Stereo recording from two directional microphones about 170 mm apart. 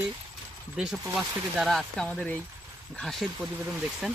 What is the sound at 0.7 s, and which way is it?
Speech, 5° right (ahead or behind).